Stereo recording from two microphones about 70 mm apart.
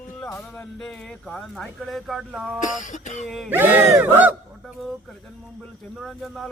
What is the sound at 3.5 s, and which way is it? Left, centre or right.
Speech, right.